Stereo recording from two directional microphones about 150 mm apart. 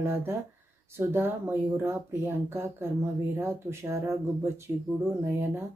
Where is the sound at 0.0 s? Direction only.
15° right (ahead or behind).